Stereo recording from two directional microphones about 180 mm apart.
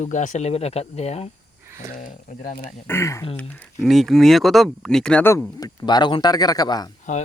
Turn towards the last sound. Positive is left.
turn(degrees=40)  # may be behind; listen again after turning